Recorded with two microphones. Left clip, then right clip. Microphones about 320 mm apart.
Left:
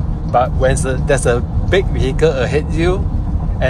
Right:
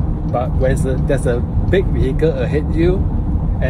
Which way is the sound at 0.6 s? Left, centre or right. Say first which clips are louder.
Left 3 dB; left.